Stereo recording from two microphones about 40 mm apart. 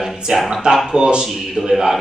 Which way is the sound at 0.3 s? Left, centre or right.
Centre.